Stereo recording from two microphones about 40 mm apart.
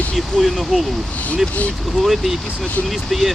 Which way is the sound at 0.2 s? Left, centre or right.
Centre.